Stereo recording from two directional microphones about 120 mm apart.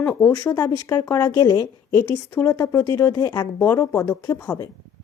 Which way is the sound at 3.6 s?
15° left (ahead or behind).